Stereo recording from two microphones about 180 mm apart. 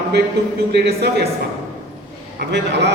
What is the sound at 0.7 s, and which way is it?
Speech, 65° right (ahead or behind).